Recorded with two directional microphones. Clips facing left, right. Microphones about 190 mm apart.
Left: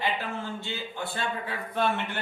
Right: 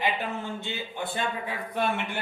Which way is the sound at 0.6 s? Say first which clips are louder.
Right 1 dB; 20° right (ahead or behind).